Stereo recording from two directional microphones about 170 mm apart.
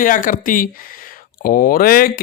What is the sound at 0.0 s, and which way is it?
Speech, 50° left (ahead or behind).